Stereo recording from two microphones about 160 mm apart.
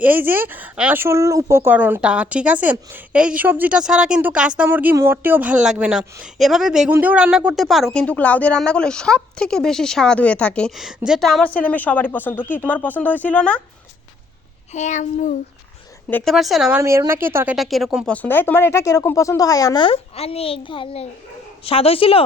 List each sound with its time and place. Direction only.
0.0 s speech: 10° right (ahead or behind); by 13.6 s 10° left (ahead or behind)
14.7 s a child's voice: 50° left (ahead or behind)
16.0 s speech: 10° left (ahead or behind)
16.3 s speech: centre (ahead or behind)
16.8 s a woman's voice: 15° right (ahead or behind); by 22.2 s 35° left (ahead or behind)